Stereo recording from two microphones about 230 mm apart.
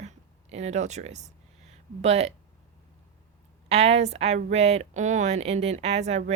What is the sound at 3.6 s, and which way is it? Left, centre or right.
Speech, right.